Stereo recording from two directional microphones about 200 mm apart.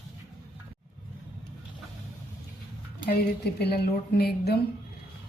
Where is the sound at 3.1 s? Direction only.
55° left (ahead or behind).